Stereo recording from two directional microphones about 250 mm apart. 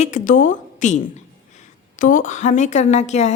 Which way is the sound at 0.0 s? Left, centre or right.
Left.